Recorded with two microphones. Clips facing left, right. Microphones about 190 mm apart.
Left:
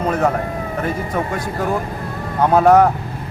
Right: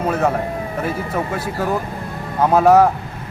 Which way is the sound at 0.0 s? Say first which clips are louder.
Even; 5° right (ahead or behind).